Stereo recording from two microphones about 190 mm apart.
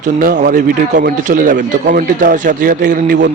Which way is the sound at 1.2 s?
45° right (ahead or behind).